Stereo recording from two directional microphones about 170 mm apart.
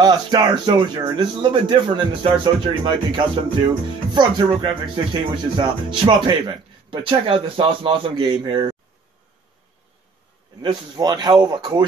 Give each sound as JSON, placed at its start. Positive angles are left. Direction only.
{"t": 0.0, "sound": "music", "side_deg": -25}
{"t": 10.6, "sound": "music", "side_deg": -25}